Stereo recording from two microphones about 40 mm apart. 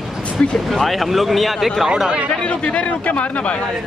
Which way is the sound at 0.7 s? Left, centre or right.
Centre.